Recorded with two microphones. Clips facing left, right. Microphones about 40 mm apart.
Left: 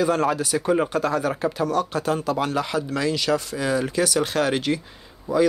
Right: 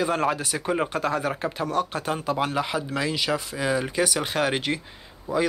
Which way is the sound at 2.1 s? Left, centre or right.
Centre.